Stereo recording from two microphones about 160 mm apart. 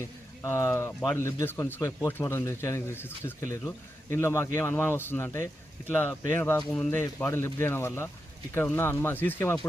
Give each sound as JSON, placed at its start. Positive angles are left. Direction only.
{"t": 0.0, "sound": "speech", "side_deg": 15}